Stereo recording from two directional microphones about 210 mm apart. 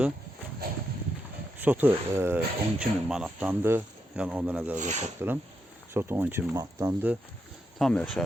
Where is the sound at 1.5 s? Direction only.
10° right (ahead or behind).